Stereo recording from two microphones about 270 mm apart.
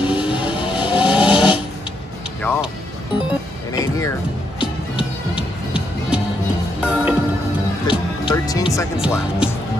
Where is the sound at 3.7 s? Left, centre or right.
Centre.